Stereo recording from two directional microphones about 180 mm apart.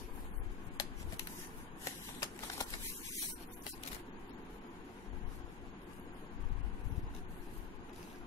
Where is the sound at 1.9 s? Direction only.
15° left (ahead or behind).